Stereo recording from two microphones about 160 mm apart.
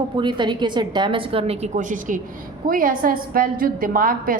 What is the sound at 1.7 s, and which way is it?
A woman's voice, 55° right (ahead or behind).